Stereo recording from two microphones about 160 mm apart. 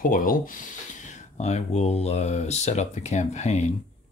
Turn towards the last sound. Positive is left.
turn(degrees=45)  # may be behind; listen again after turning